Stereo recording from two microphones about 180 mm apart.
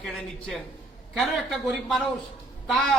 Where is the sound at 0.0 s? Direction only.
5° left (ahead or behind).